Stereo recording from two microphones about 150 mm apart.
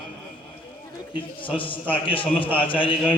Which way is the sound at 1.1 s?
35° left (ahead or behind).